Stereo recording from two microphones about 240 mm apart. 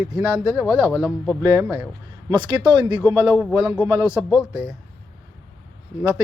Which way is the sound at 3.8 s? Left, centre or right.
Centre.